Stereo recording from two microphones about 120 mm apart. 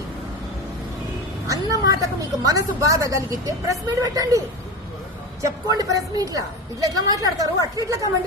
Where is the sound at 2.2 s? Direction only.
30° right (ahead or behind).